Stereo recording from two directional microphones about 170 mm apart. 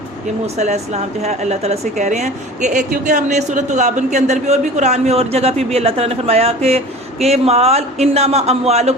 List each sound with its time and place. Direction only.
0.4 s a woman's voice: 40° right (ahead or behind)